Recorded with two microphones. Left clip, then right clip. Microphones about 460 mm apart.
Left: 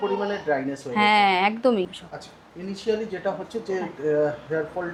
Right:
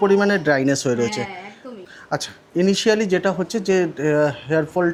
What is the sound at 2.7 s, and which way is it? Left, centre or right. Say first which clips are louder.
Speech: right 5 dB; right.